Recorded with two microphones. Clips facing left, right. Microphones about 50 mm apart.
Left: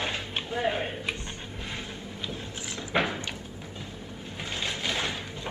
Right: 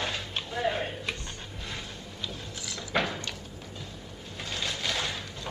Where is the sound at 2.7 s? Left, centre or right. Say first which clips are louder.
Left 2 dB; left.